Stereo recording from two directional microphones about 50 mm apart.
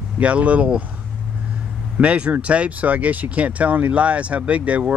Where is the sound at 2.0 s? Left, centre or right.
Right.